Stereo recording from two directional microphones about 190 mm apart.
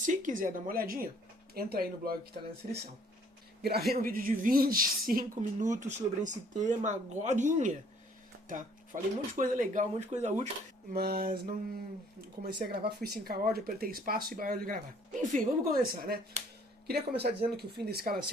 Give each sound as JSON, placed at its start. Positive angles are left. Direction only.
{"t": 0.0, "sound": "speech", "side_deg": -40}
{"t": 2.3, "sound": "a woman's voice", "side_deg": -40}
{"t": 3.6, "sound": "a woman's voice", "side_deg": -55}
{"t": 10.9, "sound": "speech", "side_deg": -55}
{"t": 12.6, "sound": "a woman's voice", "side_deg": -55}